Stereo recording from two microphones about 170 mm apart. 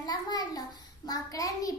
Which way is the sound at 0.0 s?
25° left (ahead or behind).